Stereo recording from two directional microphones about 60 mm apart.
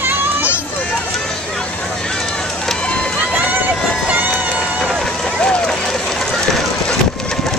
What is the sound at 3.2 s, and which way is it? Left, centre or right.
Run, right.